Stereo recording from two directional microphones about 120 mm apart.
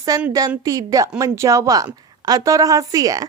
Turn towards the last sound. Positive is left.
turn(degrees=-30)  # may be behind; listen again after turning